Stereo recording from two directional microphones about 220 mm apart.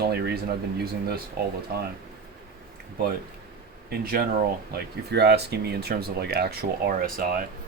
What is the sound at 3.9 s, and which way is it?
Speech, 45° right (ahead or behind).